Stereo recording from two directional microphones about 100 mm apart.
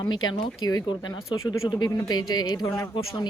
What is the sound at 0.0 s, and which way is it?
Speech, 45° left (ahead or behind).